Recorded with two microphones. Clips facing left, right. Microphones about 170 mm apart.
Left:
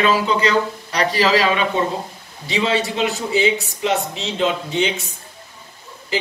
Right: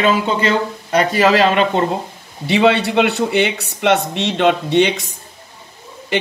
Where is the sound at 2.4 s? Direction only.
65° right (ahead or behind).